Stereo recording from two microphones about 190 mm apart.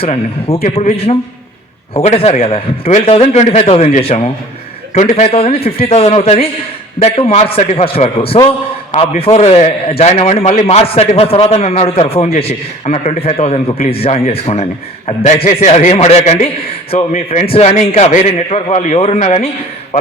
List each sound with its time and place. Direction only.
0.0 s a man's voice: 30° left (ahead or behind)